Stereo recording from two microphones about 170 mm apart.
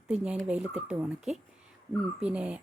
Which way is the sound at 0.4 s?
5° right (ahead or behind).